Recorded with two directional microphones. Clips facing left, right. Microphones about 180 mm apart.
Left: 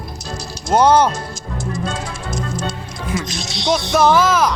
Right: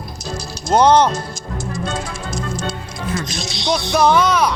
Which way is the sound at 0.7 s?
5° left (ahead or behind).